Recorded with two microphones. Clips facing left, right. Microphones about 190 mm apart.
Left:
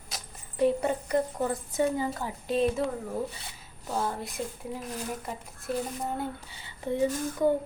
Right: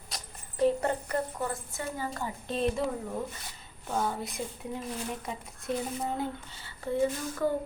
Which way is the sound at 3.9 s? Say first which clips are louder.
Even; centre (ahead or behind).